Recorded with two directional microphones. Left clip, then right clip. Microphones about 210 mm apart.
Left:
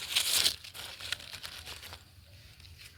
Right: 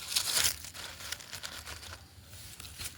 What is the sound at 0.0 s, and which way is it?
Crumpling, centre (ahead or behind).